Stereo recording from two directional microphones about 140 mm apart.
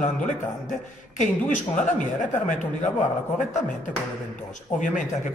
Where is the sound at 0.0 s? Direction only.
60° left (ahead or behind).